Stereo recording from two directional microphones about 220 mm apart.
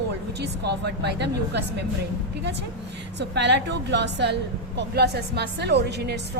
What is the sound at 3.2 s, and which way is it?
A woman's voice, 50° right (ahead or behind).